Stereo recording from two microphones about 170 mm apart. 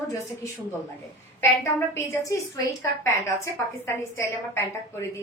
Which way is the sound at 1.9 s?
15° left (ahead or behind).